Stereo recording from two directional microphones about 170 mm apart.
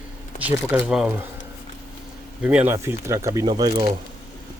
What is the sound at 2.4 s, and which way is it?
Speech, 10° right (ahead or behind).